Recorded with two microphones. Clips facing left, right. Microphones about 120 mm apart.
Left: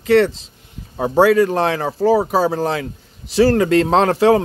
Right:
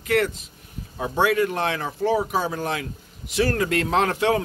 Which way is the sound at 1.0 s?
35° left (ahead or behind).